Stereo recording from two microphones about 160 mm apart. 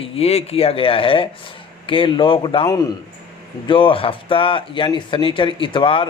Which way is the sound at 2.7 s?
20° left (ahead or behind).